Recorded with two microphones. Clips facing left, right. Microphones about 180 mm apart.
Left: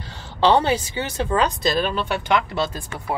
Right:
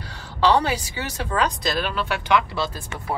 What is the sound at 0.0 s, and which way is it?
A woman's voice, 25° left (ahead or behind).